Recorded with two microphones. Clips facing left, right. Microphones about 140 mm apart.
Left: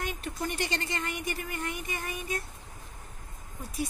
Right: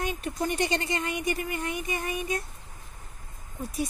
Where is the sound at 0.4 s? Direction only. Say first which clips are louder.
Right 6 dB; 15° right (ahead or behind).